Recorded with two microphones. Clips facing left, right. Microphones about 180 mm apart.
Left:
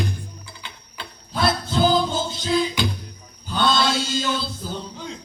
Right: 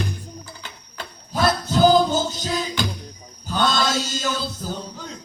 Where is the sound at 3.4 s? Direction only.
45° right (ahead or behind).